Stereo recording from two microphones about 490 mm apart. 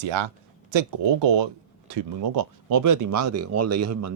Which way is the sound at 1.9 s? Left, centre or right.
Right.